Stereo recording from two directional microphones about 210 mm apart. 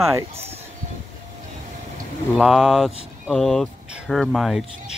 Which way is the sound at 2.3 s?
Centre (ahead or behind).